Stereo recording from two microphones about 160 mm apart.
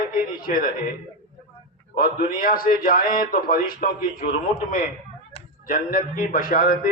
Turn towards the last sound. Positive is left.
turn(degrees=60)  # may be behind; listen again after turning